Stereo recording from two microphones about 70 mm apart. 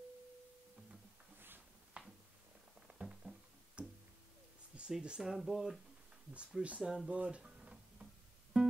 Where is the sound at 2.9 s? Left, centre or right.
Centre.